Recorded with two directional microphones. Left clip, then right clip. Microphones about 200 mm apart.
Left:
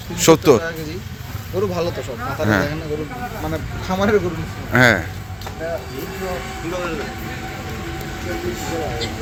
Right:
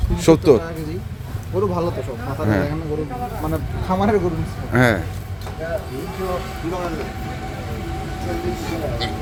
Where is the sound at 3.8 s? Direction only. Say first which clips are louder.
Even; 60° right (ahead or behind).